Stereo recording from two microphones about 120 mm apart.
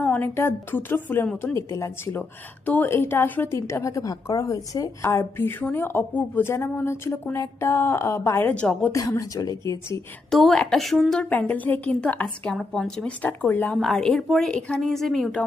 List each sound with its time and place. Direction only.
0.0 s a woman's voice: 15° left (ahead or behind)
8.9 s a woman's voice: 30° left (ahead or behind)
10.2 s a woman's voice: centre (ahead or behind)
13.7 s a woman's voice: 5° left (ahead or behind)